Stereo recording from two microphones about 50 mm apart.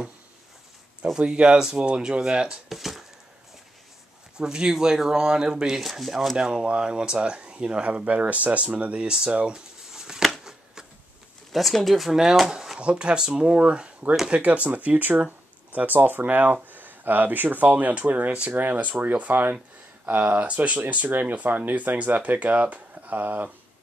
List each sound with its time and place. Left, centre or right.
1.1 s speech: right
2.7 s speech: centre
4.4 s speech: centre
5.9 s speech: centre
6.3 s speech: centre
9.9 s a sound: centre
10.4 s shuffling cards: centre
11.5 s speech: centre; by 18.5 s right
18.5 s speech: right